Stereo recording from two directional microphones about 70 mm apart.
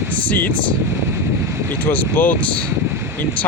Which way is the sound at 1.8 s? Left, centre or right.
Left.